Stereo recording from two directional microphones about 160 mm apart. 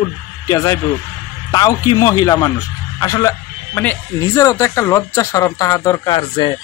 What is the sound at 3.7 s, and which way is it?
Speech, 10° left (ahead or behind).